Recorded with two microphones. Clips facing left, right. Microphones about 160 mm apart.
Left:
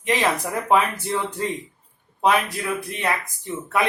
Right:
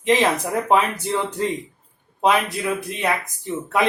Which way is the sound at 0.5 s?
25° right (ahead or behind).